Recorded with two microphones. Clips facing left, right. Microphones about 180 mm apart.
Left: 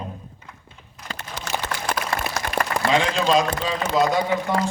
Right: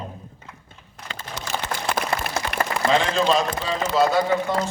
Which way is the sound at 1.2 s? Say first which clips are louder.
Even; 65° left (ahead or behind).